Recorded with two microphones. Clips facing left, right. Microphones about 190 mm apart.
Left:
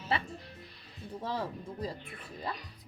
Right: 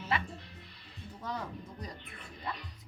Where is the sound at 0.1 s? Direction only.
30° left (ahead or behind).